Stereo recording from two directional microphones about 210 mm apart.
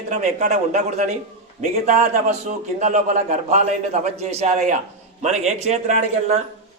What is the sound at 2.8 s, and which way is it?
Speech, 35° right (ahead or behind).